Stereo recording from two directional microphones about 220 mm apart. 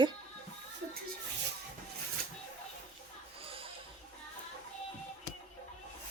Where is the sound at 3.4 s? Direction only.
25° right (ahead or behind).